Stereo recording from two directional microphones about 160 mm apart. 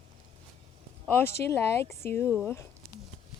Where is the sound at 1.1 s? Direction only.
10° left (ahead or behind).